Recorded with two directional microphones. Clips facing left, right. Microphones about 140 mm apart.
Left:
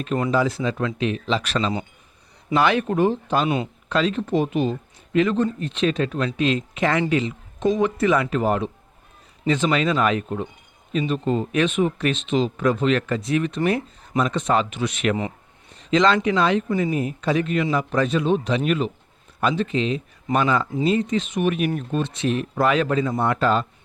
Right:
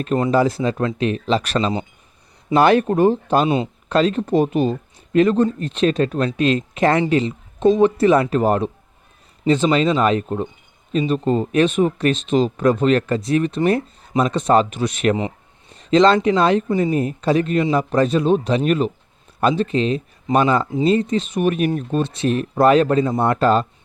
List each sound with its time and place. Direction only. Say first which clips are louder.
0.0 s speech: right 4 dB; 40° right (ahead or behind)